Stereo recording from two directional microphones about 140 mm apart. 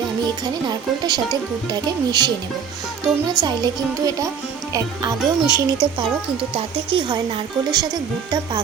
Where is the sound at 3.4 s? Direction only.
30° right (ahead or behind).